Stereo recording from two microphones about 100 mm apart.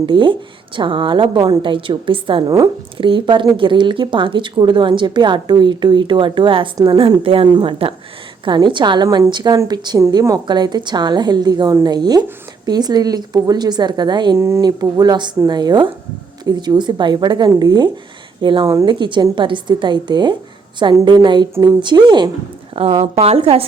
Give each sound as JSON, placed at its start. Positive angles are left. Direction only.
{"t": 0.0, "sound": "a woman's voice", "side_deg": -55}
{"t": 7.3, "sound": "a woman's voice", "side_deg": -65}
{"t": 14.3, "sound": "speech", "side_deg": -30}
{"t": 14.6, "sound": "speech", "side_deg": -40}
{"t": 18.6, "sound": "a woman's voice", "side_deg": -30}
{"t": 18.9, "sound": "speech", "side_deg": -50}
{"t": 22.7, "sound": "a woman's voice", "side_deg": -70}
{"t": 23.2, "sound": "a woman's voice", "side_deg": -85}